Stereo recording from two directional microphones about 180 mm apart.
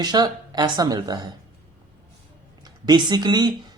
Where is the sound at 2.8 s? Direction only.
25° right (ahead or behind).